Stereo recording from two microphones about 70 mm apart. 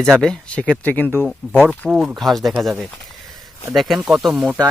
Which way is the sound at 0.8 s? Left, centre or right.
Left.